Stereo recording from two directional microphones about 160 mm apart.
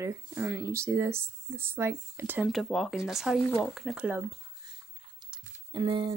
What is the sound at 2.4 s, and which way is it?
Speech, centre (ahead or behind).